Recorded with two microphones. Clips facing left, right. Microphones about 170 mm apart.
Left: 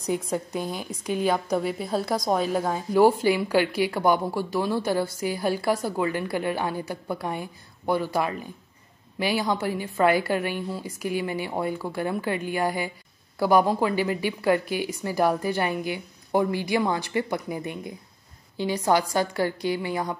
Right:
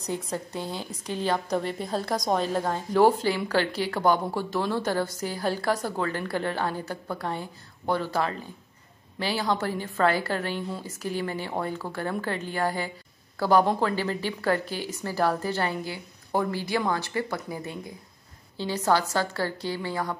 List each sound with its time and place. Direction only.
0.1 s a woman's voice: 10° left (ahead or behind)